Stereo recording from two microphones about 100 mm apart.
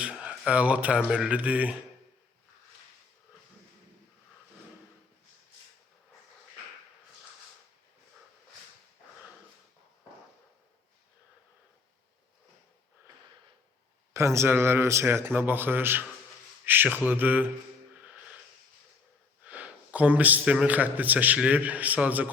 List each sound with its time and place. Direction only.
0.0 s speech: 10° right (ahead or behind)
14.1 s a man's voice: 30° right (ahead or behind)
19.5 s a man's voice: 15° right (ahead or behind)